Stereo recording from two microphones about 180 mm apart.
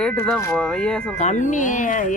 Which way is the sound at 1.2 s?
40° left (ahead or behind).